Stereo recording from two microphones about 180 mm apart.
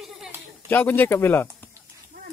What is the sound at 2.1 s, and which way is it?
Dog, 55° right (ahead or behind).